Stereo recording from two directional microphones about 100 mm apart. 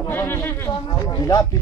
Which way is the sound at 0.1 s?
20° left (ahead or behind).